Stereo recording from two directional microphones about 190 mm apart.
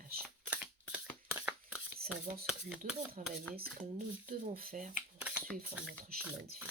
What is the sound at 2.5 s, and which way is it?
Speech, 5° right (ahead or behind).